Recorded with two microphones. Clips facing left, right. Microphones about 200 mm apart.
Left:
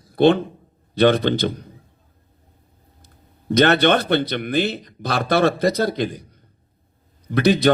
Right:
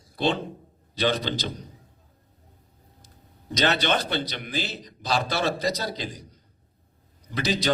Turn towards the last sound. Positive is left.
turn(degrees=55)  # may be behind; listen again after turning